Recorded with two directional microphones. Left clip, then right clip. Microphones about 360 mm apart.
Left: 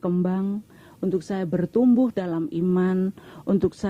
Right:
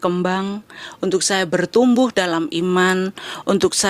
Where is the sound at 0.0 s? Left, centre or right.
Centre.